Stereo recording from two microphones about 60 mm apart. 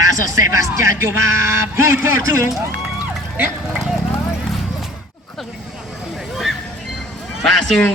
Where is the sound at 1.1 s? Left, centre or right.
Right.